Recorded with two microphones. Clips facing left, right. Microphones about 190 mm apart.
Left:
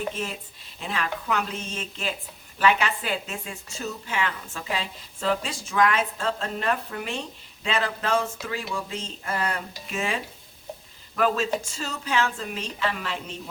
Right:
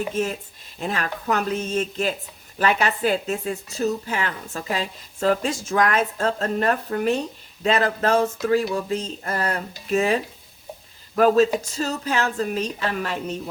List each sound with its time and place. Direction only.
0.1 s a woman's voice: 45° right (ahead or behind)